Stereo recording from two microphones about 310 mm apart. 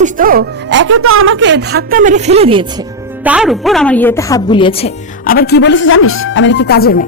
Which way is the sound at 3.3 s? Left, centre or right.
Centre.